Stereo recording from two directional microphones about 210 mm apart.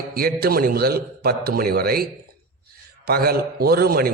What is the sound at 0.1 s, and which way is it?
A man's voice, 45° right (ahead or behind).